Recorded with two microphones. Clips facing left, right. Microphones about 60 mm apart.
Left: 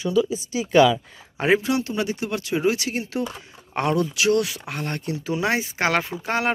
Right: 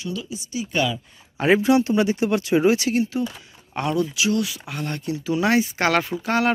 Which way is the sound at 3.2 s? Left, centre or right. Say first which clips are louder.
Right 1 dB; left.